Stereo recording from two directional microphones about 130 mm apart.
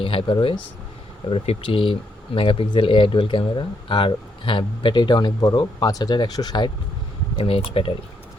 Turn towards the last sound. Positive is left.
turn(degrees=40)  # may be behind; listen again after turning